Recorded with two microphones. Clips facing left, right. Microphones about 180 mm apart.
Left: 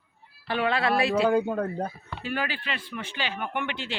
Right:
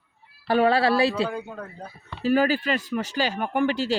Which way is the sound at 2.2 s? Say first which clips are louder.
Right 10 dB; 40° right (ahead or behind).